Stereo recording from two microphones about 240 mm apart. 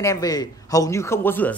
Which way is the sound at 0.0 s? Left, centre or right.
Centre.